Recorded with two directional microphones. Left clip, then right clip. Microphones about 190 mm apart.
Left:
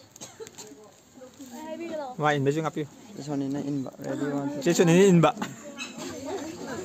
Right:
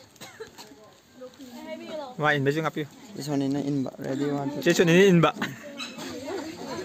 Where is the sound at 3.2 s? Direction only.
65° right (ahead or behind).